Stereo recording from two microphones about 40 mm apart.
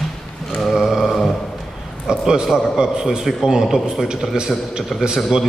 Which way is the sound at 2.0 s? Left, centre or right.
Centre.